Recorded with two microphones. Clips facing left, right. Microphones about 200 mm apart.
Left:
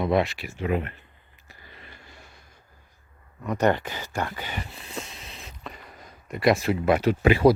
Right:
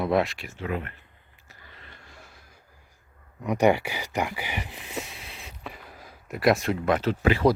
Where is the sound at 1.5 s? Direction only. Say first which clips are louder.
Left 2 dB; 10° left (ahead or behind).